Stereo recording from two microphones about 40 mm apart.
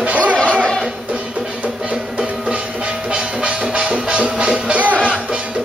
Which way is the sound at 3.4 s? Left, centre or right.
Right.